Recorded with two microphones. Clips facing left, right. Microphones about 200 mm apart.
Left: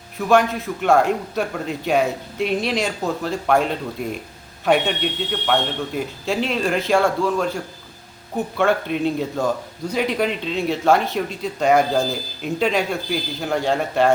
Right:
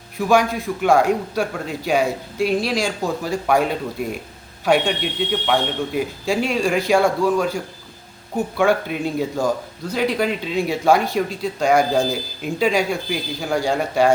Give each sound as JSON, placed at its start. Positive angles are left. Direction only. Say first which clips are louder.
{"t": 0.2, "sound": "a man's voice", "louder": "even", "side_deg": 0}
{"t": 6.4, "sound": "a man's voice", "louder": "right 1 dB", "side_deg": -10}
{"t": 10.9, "sound": "speech", "louder": "right 1 dB", "side_deg": -10}
{"t": 11.6, "sound": "a man's voice", "louder": "even", "side_deg": 0}